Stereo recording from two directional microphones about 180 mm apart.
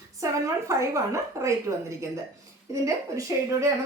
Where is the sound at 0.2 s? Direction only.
15° right (ahead or behind).